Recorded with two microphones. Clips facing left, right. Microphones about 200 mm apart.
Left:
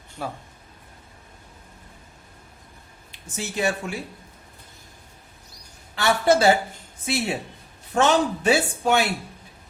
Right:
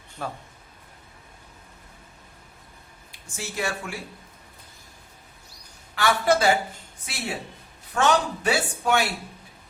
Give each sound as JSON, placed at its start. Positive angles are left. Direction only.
{"t": 0.2, "sound": "a man's voice", "side_deg": 10}
{"t": 3.1, "sound": "speech", "side_deg": 20}
{"t": 6.0, "sound": "speech", "side_deg": 25}